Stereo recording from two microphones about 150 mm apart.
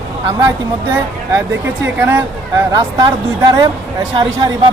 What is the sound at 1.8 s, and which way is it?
Speech, 15° right (ahead or behind).